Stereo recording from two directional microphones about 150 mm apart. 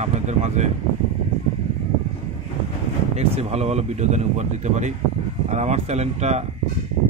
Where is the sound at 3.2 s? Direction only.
45° right (ahead or behind).